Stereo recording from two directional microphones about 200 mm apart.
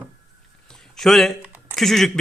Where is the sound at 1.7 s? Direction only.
Centre (ahead or behind).